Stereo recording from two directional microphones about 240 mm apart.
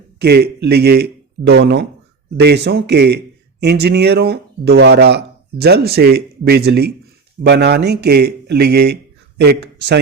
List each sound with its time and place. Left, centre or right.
0.2 s a man's voice: right